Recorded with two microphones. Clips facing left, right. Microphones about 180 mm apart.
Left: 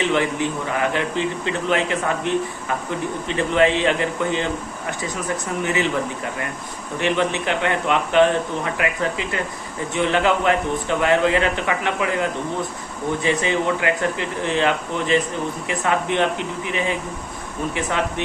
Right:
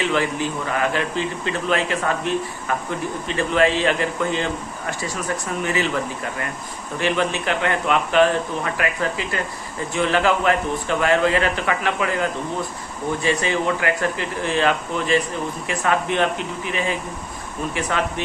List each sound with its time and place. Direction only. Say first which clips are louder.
0.0 s a man's voice: left 1 dB; 20° left (ahead or behind)
5.6 s a man's voice: left 1 dB; 20° left (ahead or behind)
7.0 s a man's voice: left 1 dB; 20° left (ahead or behind)
13.2 s a man's voice: left 1 dB; 20° left (ahead or behind)